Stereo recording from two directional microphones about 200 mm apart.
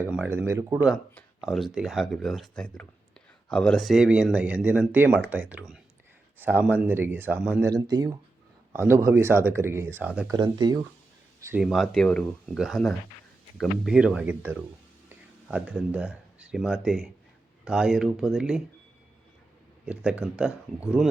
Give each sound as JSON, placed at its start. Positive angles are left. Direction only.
{"t": 0.0, "sound": "speech", "side_deg": -10}
{"t": 10.3, "sound": "speech", "side_deg": -20}
{"t": 11.6, "sound": "speech", "side_deg": 0}
{"t": 19.8, "sound": "speech", "side_deg": -5}